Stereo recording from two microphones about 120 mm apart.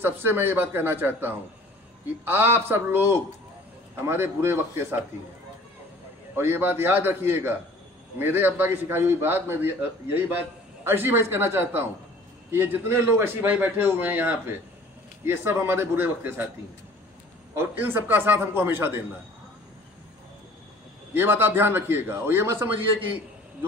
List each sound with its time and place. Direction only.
0.0 s a man's voice: 20° right (ahead or behind)
6.3 s a man's voice: 20° right (ahead or behind)
17.6 s a man's voice: 15° right (ahead or behind)
21.1 s a man's voice: 15° right (ahead or behind)